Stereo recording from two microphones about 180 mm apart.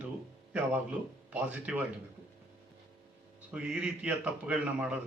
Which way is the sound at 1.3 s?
10° right (ahead or behind).